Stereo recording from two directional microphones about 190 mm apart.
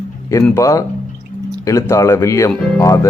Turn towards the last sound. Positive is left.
turn(degrees=15)  # may be behind; listen again after turning